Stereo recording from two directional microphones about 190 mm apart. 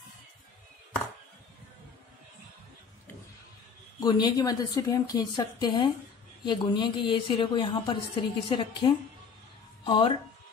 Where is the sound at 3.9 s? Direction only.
20° left (ahead or behind).